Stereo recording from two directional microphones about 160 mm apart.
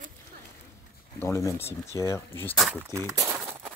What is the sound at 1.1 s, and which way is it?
Speech, 15° left (ahead or behind).